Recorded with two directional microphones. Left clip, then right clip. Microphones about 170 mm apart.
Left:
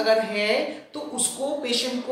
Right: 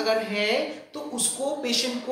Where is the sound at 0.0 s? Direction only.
15° right (ahead or behind).